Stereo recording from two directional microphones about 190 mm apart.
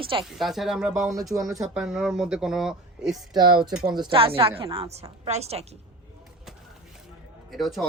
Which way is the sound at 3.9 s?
25° right (ahead or behind).